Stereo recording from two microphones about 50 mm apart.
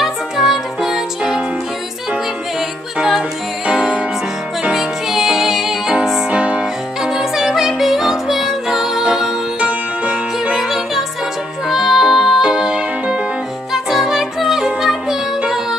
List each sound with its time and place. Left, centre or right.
0.0 s music: centre
3.0 s music: centre
6.3 s music: right
6.6 s music: centre
9.6 s music: right
10.6 s music: centre
12.4 s music: centre
13.8 s music: centre